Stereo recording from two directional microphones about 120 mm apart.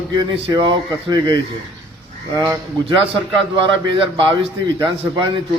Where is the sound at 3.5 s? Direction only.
45° right (ahead or behind).